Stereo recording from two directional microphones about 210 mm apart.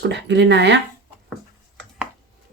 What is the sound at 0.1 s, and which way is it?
Speech, 55° right (ahead or behind).